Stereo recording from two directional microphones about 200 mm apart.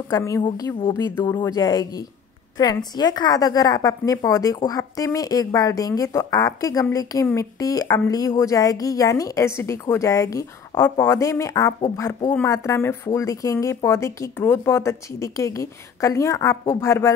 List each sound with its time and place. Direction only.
0.1 s speech: 15° left (ahead or behind)